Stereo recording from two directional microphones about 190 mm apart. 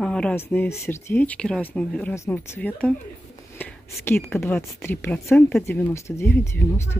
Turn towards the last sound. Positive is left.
turn(degrees=10)  # may be behind; listen again after turning